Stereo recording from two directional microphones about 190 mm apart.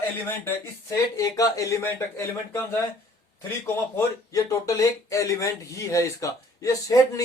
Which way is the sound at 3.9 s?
15° left (ahead or behind).